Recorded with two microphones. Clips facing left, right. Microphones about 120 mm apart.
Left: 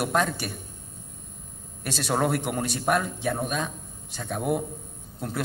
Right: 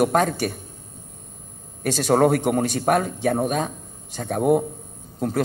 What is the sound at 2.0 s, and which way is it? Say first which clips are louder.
A man's voice: right 7 dB; 45° right (ahead or behind).